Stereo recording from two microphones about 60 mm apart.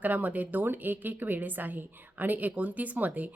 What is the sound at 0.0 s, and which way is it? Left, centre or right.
A woman's voice, right.